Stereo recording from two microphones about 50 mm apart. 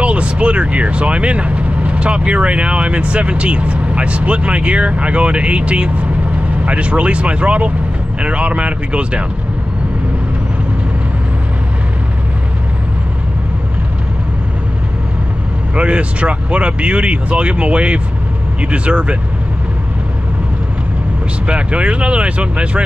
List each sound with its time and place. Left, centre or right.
0.0 s speech: right
15.7 s speech: right
21.5 s speech: right